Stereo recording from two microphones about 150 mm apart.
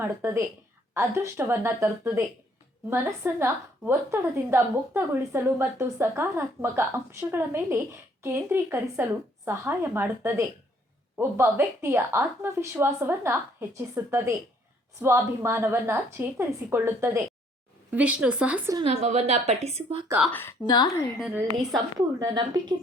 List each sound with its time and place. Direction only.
0.0 s a woman's voice: 15° right (ahead or behind)
18.9 s a woman's voice: 45° right (ahead or behind)
20.3 s a woman's voice: 15° left (ahead or behind)
21.2 s a woman's voice: 10° right (ahead or behind)
21.9 s a woman's voice: 25° right (ahead or behind)